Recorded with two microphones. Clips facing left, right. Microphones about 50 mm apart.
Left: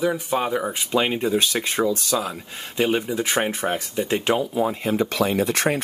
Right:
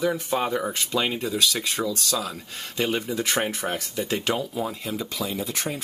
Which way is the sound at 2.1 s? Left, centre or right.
Centre.